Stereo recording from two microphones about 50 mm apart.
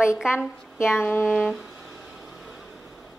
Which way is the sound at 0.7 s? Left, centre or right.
Left.